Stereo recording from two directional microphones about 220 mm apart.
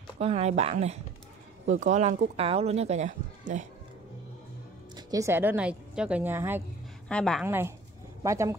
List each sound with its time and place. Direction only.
0.2 s speech: 30° right (ahead or behind)
4.9 s a woman's voice: 15° right (ahead or behind)
7.1 s a woman's voice: 5° left (ahead or behind)
7.4 s speech: 10° right (ahead or behind)